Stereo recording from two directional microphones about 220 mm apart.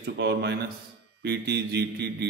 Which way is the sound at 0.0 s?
50° right (ahead or behind).